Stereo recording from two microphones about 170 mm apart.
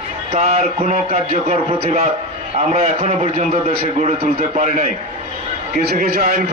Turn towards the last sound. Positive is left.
turn(degrees=-60)  # may be behind; listen again after turning